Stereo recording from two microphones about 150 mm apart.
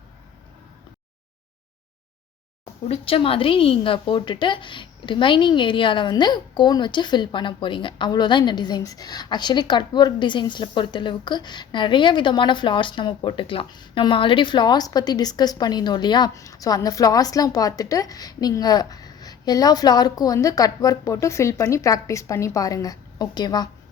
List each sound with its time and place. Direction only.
2.9 s a woman's voice: 40° left (ahead or behind)